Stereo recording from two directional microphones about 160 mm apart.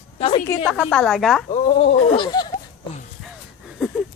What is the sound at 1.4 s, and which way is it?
Speech, 40° left (ahead or behind).